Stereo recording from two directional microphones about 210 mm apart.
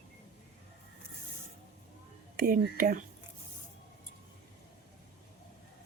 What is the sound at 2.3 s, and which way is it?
Speech, 45° right (ahead or behind).